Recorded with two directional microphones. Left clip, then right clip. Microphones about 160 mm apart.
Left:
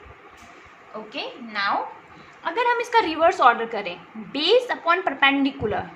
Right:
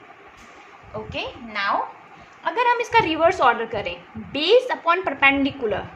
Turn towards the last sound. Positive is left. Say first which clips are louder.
# right 1 dB
turn(degrees=-10)  # may be behind; listen again after turning